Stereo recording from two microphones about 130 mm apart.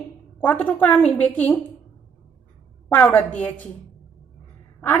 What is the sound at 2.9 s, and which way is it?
Speech, 15° left (ahead or behind).